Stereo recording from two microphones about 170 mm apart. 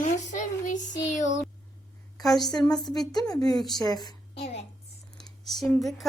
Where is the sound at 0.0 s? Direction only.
45° left (ahead or behind).